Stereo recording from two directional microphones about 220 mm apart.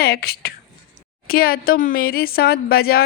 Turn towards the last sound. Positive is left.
turn(degrees=45)  # may be behind; listen again after turning